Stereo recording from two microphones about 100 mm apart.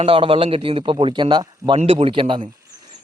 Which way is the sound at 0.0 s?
65° right (ahead or behind).